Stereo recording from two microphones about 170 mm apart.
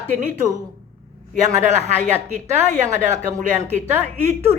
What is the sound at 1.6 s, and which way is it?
A man's voice, 45° right (ahead or behind).